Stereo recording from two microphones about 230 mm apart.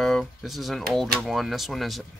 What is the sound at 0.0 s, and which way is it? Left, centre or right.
Speech, centre.